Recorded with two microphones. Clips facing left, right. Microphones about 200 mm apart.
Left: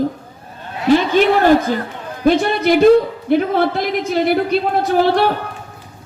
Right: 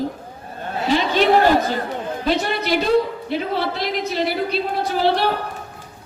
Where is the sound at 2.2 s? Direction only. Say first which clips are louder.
Left 9 dB; 50° left (ahead or behind).